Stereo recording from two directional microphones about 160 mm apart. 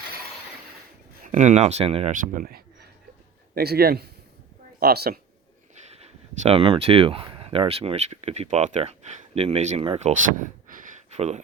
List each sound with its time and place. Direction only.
1.2 s speech: 50° right (ahead or behind)
2.3 s speech: 60° right (ahead or behind)
3.5 s speech: 75° right (ahead or behind)
5.9 s speech: 40° right (ahead or behind)